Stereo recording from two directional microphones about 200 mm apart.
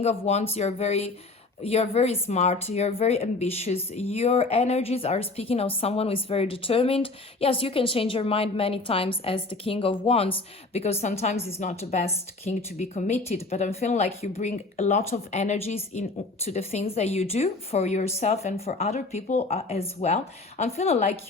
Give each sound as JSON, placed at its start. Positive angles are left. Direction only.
{"t": 0.0, "sound": "a woman's voice", "side_deg": 30}